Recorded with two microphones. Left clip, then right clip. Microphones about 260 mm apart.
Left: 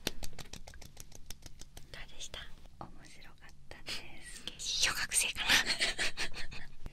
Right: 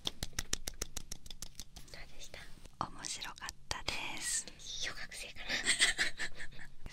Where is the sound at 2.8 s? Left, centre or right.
Right.